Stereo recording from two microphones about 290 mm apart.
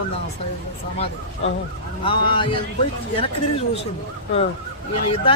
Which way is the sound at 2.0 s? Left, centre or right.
Centre.